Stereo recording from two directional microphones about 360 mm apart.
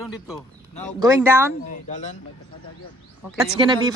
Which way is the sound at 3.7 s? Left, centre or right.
Centre.